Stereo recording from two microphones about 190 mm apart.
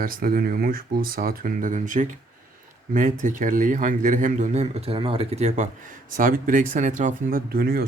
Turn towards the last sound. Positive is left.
turn(degrees=-50)  # may be behind; listen again after turning